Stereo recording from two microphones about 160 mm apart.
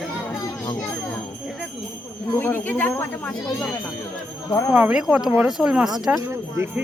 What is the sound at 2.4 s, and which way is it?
Speech, 10° left (ahead or behind).